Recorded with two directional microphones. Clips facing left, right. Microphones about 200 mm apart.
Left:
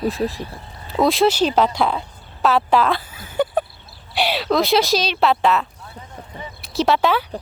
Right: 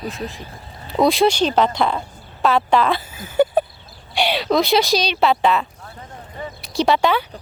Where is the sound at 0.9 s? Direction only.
Centre (ahead or behind).